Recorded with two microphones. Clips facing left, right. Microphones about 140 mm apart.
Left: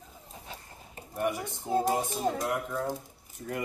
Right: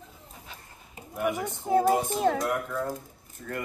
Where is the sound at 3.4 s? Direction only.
25° left (ahead or behind).